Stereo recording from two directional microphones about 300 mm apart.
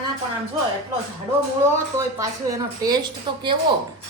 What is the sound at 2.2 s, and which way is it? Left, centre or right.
A woman's voice, centre.